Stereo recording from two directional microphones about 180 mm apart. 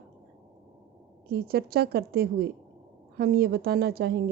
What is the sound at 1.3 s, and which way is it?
A woman's voice, 60° right (ahead or behind).